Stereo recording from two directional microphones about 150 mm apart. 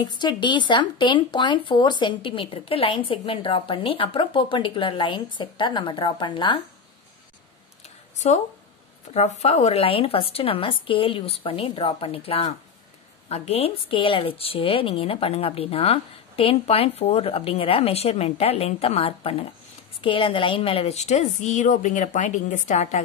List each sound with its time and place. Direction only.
0.0 s speech: 30° left (ahead or behind)
9.4 s a woman's voice: 45° left (ahead or behind)